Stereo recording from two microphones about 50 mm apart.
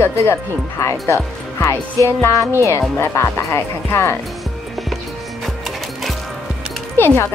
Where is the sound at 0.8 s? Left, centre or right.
Left.